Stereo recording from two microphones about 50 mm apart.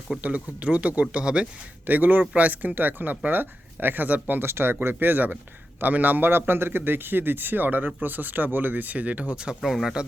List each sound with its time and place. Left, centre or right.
0.2 s speech: right
1.9 s speech: right
4.4 s a man's voice: right
9.6 s speech: centre